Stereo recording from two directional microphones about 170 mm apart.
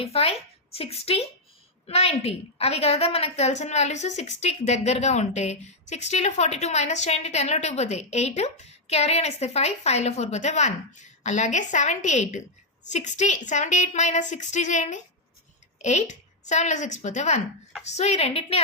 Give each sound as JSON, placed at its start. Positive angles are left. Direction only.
{"t": 0.0, "sound": "a woman's voice", "side_deg": 35}